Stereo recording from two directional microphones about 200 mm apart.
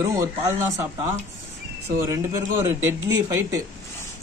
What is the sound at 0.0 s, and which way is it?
A man's voice, 15° right (ahead or behind).